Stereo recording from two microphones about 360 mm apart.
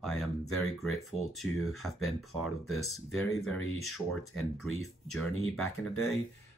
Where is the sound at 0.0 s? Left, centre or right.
Centre.